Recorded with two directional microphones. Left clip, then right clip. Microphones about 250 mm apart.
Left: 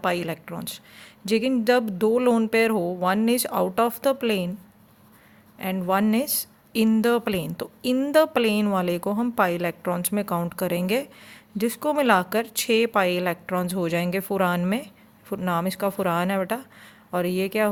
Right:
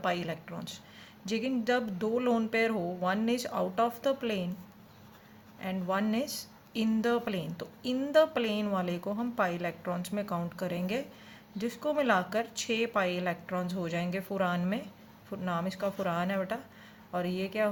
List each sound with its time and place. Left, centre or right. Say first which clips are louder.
0.0 s a woman's voice: left 7 dB; left
5.5 s a woman's voice: left 9 dB; left